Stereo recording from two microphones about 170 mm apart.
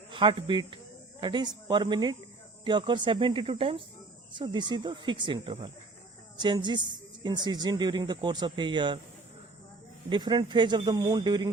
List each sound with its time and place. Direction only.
0.1 s a woman's voice: 30° right (ahead or behind)
10.1 s a woman's voice: 25° right (ahead or behind)